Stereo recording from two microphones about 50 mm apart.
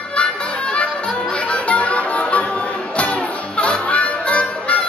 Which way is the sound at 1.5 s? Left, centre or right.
Left.